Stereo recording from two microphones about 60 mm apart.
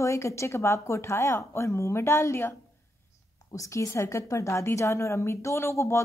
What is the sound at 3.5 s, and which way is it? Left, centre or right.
A woman's voice, left.